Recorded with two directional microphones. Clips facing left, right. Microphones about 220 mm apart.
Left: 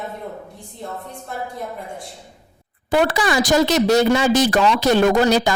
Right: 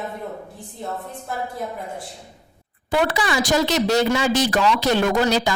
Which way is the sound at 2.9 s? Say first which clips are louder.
Left 3 dB; 45° left (ahead or behind).